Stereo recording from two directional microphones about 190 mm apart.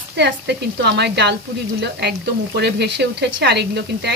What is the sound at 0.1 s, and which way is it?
Speech, 65° right (ahead or behind).